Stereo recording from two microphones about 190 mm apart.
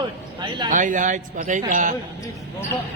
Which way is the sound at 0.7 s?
40° right (ahead or behind).